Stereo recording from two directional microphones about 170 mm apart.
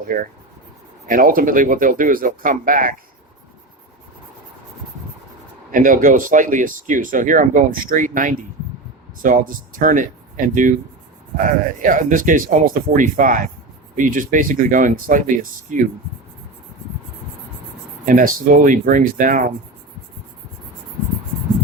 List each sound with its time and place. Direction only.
0.1 s speech: 55° right (ahead or behind)
5.7 s speech: 55° right (ahead or behind)
18.1 s speech: 55° right (ahead or behind)